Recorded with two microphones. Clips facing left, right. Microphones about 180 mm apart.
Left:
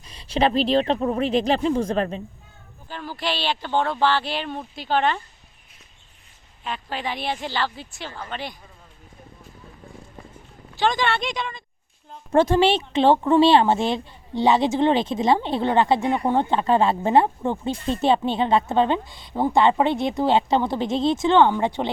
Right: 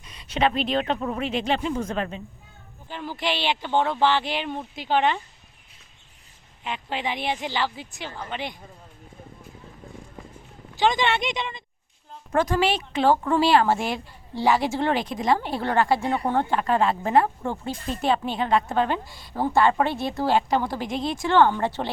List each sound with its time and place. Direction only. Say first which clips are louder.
0.0 s speech: left 2 dB; 35° left (ahead or behind)
2.9 s speech: even; 15° right (ahead or behind)
6.7 s speech: even; 20° right (ahead or behind)
10.3 s speech: left 1 dB; 15° right (ahead or behind)
12.3 s speech: left 5 dB; 30° left (ahead or behind)